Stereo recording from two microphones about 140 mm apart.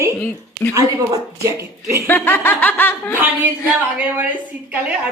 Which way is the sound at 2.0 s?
15° left (ahead or behind).